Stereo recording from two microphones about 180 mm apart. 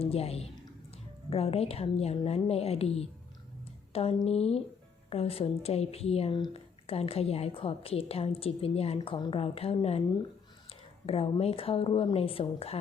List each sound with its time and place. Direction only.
0.0 s speech: 35° left (ahead or behind)
11.0 s speech: 35° left (ahead or behind)